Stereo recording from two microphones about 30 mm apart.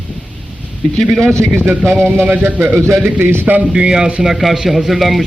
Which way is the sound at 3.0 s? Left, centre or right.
Right.